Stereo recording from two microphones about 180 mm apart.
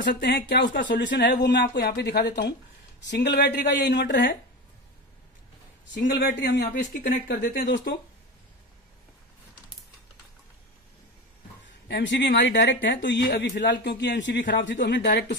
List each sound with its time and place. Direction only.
0.0 s speech: 75° left (ahead or behind)
1.4 s speech: 70° left (ahead or behind)
6.1 s speech: 75° left (ahead or behind); by 7.2 s 45° left (ahead or behind)
7.2 s speech: 75° left (ahead or behind)
11.9 s speech: 75° left (ahead or behind)
14.5 s speech: 85° left